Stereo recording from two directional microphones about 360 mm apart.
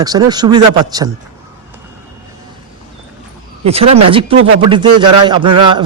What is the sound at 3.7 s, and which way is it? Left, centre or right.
Speech, centre.